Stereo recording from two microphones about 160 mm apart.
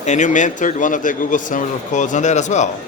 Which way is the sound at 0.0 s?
50° left (ahead or behind).